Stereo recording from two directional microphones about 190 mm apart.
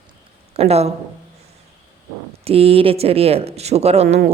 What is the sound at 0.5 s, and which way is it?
Speech, 35° right (ahead or behind).